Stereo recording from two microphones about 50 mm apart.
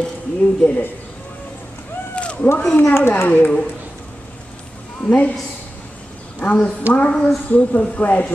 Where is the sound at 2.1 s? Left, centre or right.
Left.